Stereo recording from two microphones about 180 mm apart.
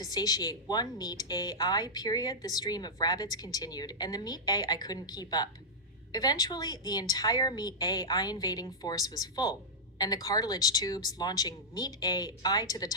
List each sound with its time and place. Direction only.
0.0 s speech: 20° left (ahead or behind)